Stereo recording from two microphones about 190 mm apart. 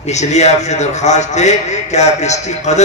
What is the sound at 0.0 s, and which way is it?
A man's voice, 35° left (ahead or behind).